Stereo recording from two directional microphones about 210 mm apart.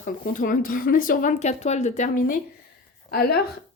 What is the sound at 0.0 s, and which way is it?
Speech, 40° left (ahead or behind).